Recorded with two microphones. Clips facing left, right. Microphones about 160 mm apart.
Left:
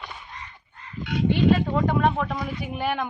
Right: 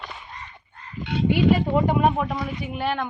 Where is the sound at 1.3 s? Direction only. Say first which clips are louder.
Right 1 dB; 15° right (ahead or behind).